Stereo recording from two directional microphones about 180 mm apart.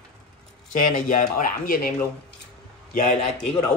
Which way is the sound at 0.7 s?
45° left (ahead or behind).